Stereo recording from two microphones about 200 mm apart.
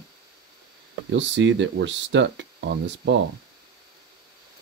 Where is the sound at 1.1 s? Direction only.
65° right (ahead or behind).